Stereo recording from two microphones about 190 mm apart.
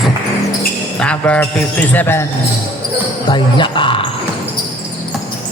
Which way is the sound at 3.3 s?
25° left (ahead or behind).